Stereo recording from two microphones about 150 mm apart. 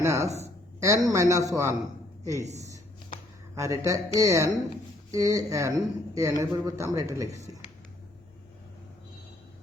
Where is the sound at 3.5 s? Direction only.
20° right (ahead or behind).